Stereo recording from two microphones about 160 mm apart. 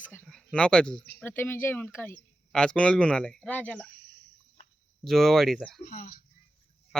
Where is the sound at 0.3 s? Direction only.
5° left (ahead or behind).